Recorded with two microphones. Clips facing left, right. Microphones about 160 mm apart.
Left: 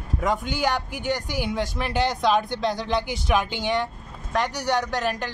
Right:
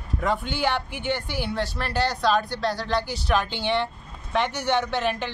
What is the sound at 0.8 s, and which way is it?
Speech, 40° left (ahead or behind).